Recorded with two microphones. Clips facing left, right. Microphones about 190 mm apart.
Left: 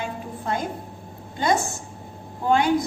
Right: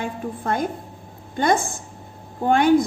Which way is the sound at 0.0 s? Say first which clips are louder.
Right 3 dB; 55° right (ahead or behind).